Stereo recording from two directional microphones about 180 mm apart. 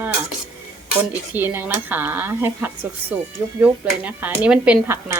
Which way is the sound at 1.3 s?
10° right (ahead or behind).